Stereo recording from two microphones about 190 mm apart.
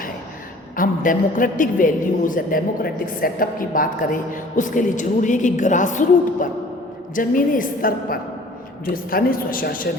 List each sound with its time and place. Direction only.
0.8 s a woman's voice: 45° left (ahead or behind)